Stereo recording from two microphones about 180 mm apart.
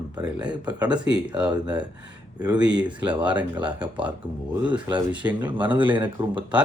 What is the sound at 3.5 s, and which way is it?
Speech, 25° right (ahead or behind).